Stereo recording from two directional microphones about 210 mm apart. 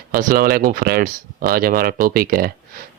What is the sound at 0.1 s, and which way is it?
Speech, 40° right (ahead or behind).